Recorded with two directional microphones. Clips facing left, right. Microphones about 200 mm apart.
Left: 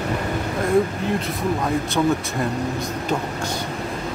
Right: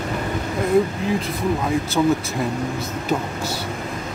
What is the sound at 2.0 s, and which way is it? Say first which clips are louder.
Speech: right 2 dB; 5° right (ahead or behind).